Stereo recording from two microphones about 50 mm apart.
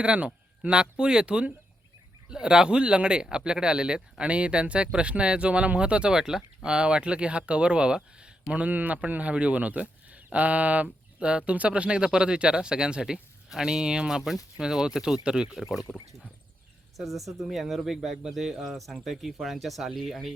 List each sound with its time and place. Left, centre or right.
0.0 s speech: right
17.0 s speech: centre